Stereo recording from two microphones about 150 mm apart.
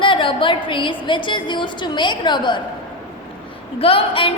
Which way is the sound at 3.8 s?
40° left (ahead or behind).